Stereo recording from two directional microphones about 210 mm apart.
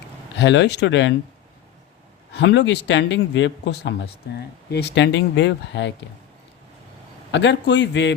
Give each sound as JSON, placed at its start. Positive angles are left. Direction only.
{"t": 0.3, "sound": "speech", "side_deg": 55}
{"t": 2.3, "sound": "speech", "side_deg": 55}
{"t": 7.3, "sound": "speech", "side_deg": 60}